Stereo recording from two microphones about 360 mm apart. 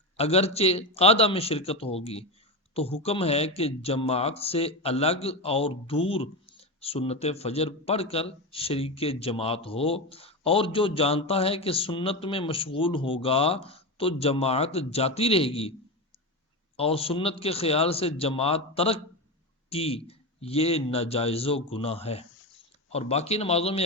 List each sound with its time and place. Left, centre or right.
0.2 s speech: centre
16.7 s speech: centre